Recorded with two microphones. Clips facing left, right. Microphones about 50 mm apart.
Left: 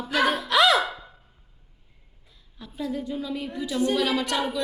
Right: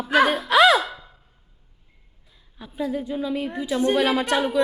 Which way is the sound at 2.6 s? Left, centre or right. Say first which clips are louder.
Right 4 dB; centre.